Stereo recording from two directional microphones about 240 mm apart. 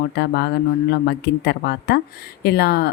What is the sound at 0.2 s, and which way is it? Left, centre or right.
A woman's voice, left.